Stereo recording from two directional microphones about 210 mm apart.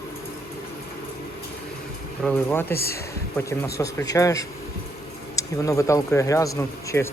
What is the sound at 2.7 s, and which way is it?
Speech, 45° left (ahead or behind).